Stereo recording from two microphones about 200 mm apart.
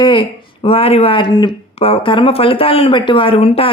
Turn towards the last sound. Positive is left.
turn(degrees=30)  # may be behind; listen again after turning